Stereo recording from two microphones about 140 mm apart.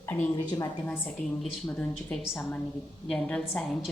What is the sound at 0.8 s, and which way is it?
A woman's voice, 10° left (ahead or behind).